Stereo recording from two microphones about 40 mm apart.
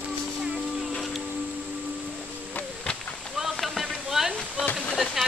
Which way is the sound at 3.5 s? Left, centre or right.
Centre.